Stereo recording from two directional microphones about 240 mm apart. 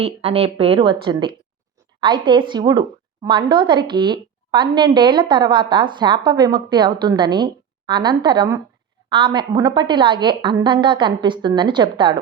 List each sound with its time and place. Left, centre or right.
0.0 s a woman's voice: right